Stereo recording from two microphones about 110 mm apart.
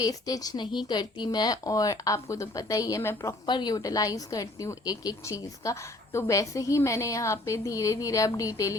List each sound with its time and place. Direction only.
0.0 s a woman's voice: 35° left (ahead or behind)
3.4 s a woman's voice: 40° left (ahead or behind)